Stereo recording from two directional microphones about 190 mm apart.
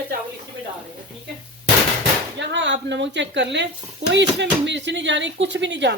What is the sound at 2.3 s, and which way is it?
Speech, 70° right (ahead or behind).